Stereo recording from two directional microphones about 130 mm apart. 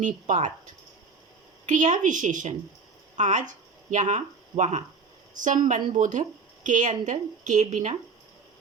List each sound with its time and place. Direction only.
0.0 s speech: 70° right (ahead or behind)
1.6 s a woman's voice: 80° right; by 7.9 s 65° right (ahead or behind)